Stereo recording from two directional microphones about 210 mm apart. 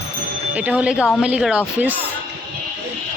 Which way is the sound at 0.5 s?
5° right (ahead or behind).